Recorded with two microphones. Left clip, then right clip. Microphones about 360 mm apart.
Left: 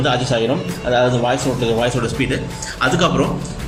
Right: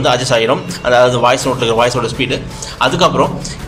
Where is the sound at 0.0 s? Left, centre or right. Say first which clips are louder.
Right 5 dB; centre.